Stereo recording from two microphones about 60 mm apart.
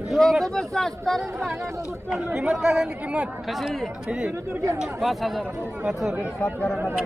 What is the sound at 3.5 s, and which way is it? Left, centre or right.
Speech, centre.